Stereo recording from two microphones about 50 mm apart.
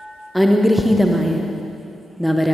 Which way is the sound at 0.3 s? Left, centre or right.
Centre.